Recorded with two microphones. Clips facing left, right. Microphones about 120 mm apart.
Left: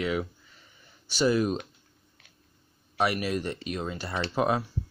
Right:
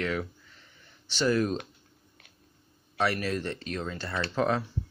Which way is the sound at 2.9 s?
15° left (ahead or behind).